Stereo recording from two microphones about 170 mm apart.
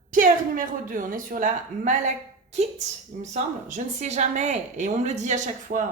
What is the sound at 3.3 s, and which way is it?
A woman's voice, 45° right (ahead or behind).